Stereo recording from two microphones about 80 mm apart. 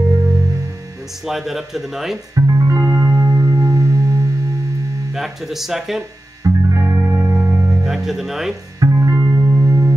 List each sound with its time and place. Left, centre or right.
1.2 s speech: centre
2.3 s music: right
5.1 s speech: centre
6.4 s music: right
7.8 s speech: centre
8.7 s music: right